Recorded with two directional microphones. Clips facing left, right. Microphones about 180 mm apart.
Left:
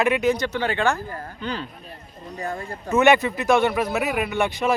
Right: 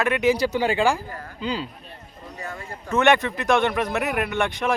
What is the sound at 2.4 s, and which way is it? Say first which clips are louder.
Speech: left 6 dB; 35° left (ahead or behind).